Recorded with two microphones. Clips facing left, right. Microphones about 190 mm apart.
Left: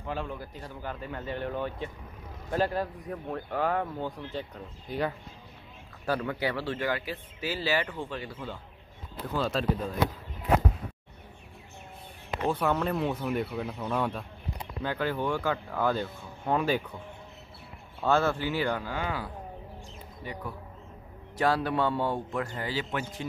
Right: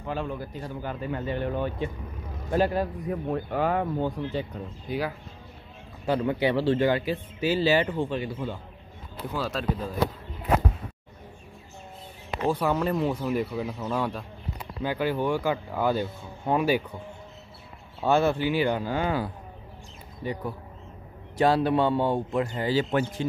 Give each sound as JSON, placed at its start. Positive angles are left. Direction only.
{"t": 0.0, "sound": "speech", "side_deg": -5}
{"t": 6.0, "sound": "speech", "side_deg": -20}
{"t": 9.3, "sound": "speech", "side_deg": -5}
{"t": 12.4, "sound": "speech", "side_deg": -5}
{"t": 18.0, "sound": "speech", "side_deg": -15}
{"t": 22.7, "sound": "speech", "side_deg": -35}